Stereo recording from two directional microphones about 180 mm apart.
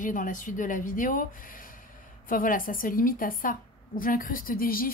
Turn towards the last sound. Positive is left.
turn(degrees=55)  # may be behind; listen again after turning